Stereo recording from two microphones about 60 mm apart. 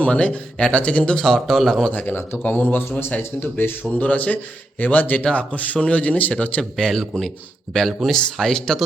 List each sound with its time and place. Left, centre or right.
0.0 s speech: left; by 1.9 s centre
1.9 s a man's voice: left
3.9 s speech: left
6.6 s a man's voice: centre